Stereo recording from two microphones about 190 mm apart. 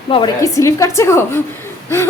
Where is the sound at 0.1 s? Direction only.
20° left (ahead or behind).